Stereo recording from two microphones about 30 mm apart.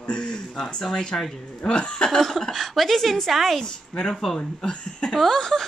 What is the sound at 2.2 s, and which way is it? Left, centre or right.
A woman's voice, centre.